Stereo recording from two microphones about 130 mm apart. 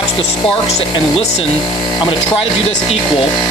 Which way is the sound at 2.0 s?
35° left (ahead or behind).